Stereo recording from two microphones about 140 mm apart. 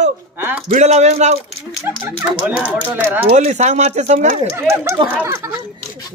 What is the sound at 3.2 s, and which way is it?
Speech, 55° right (ahead or behind).